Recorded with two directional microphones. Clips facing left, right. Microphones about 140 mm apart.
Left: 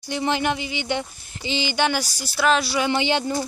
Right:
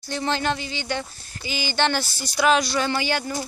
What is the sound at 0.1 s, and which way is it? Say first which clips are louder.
Speech: left 2 dB; 15° left (ahead or behind).